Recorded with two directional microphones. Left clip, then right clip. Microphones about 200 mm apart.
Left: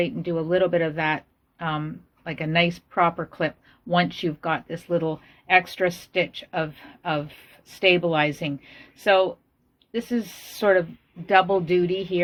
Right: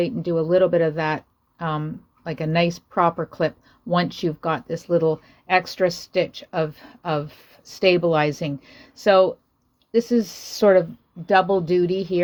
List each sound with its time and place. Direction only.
0.0 s speech: 50° right (ahead or behind)